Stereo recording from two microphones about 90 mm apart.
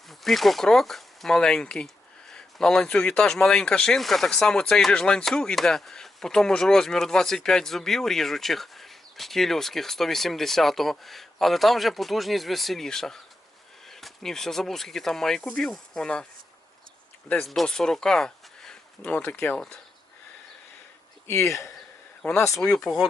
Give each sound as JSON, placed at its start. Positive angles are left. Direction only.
{"t": 0.1, "sound": "speech", "side_deg": 0}
{"t": 17.4, "sound": "speech", "side_deg": 5}
{"t": 21.2, "sound": "speech", "side_deg": 30}
{"t": 22.6, "sound": "speech", "side_deg": 5}